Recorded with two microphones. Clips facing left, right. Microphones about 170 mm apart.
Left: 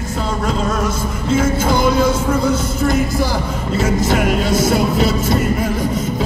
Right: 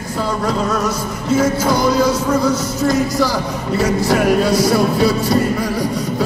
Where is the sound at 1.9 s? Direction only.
25° left (ahead or behind).